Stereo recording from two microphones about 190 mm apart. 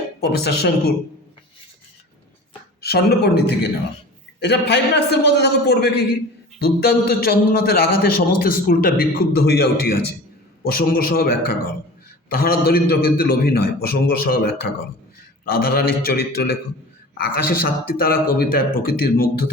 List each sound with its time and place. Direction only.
0.2 s a man's voice: 55° left (ahead or behind)
2.8 s a man's voice: 55° left (ahead or behind)